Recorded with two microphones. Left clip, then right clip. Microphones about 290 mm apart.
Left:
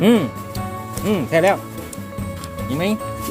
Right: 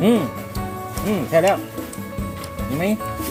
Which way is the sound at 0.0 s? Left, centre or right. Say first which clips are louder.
Left 2 dB; centre.